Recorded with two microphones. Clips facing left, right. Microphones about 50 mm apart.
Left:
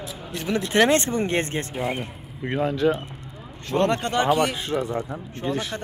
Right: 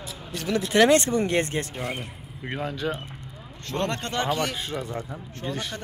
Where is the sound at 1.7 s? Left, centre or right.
Centre.